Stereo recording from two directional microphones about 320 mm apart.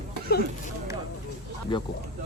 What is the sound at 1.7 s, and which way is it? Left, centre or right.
Speech, centre.